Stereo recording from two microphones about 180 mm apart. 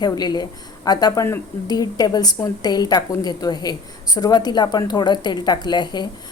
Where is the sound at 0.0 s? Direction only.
25° left (ahead or behind).